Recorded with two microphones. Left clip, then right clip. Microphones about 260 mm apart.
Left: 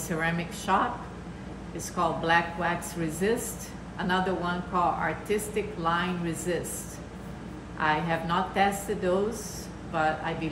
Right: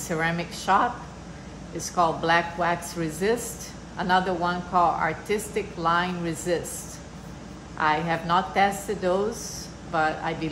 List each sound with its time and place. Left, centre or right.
0.1 s speech: right
2.0 s speech: right
7.7 s speech: right